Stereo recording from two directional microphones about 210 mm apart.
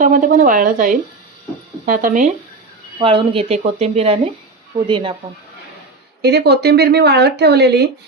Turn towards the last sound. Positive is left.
turn(degrees=-50)  # may be behind; listen again after turning